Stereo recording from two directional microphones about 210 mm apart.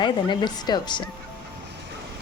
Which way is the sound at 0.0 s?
20° left (ahead or behind).